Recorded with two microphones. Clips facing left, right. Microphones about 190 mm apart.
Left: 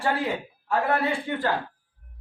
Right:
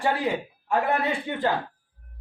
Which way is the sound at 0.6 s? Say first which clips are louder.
Even; 20° right (ahead or behind).